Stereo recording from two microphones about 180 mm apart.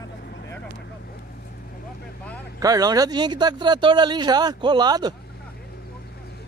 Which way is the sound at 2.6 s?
20° right (ahead or behind).